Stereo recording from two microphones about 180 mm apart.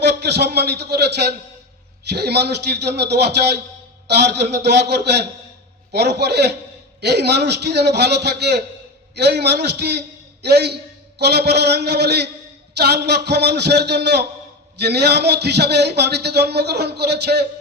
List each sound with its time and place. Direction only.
0.0 s a man's voice: 65° right (ahead or behind)